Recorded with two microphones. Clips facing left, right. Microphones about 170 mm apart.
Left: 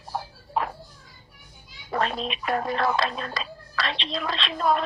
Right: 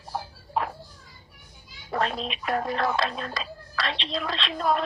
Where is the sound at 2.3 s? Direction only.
Centre (ahead or behind).